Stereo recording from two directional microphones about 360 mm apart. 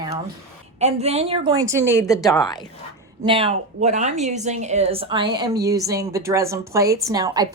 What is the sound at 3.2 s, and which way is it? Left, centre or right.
A woman's voice, centre.